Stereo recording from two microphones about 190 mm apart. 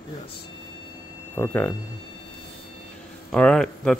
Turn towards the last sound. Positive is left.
turn(degrees=5)  # may be behind; listen again after turning